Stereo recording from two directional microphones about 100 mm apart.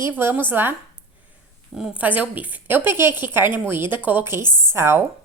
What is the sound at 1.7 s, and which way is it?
A woman's voice, 10° right (ahead or behind).